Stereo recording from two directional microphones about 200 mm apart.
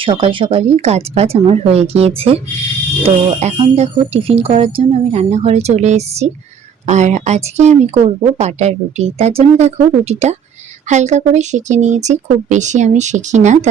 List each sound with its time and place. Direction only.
0.0 s speech: 25° right (ahead or behind)
3.4 s speech: 30° right (ahead or behind)